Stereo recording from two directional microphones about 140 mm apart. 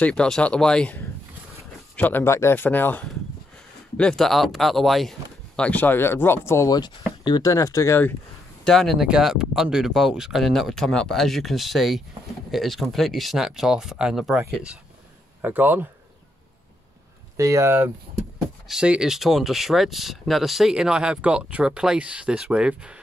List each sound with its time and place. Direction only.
0.0 s speech: 5° left (ahead or behind)
8.6 s speech: centre (ahead or behind)
17.4 s speech: 20° right (ahead or behind)
18.7 s speech: 5° right (ahead or behind)